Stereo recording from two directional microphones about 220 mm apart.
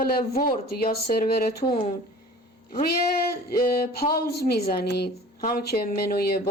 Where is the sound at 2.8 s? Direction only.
45° left (ahead or behind).